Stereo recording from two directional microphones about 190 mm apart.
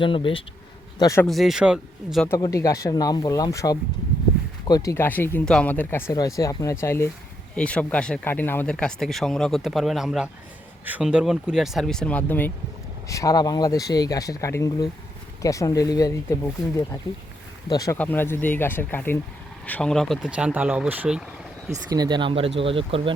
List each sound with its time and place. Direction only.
0.0 s speech: 25° left (ahead or behind)
0.9 s speech: 15° left (ahead or behind)
1.3 s speech: centre (ahead or behind)
2.2 s speech: 15° left (ahead or behind)
17.9 s speech: 10° left (ahead or behind); by 21.2 s 5° right (ahead or behind)
21.8 s speech: 20° right (ahead or behind)